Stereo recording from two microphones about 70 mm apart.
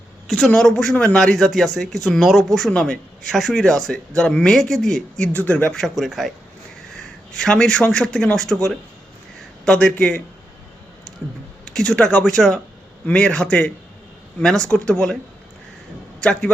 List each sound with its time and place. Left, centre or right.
0.3 s a woman's voice: centre
5.5 s speech: left
5.7 s speech: centre
11.7 s speech: centre
14.7 s speech: centre
16.2 s speech: centre